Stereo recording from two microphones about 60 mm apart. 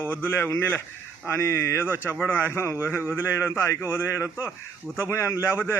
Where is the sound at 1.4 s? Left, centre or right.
Left.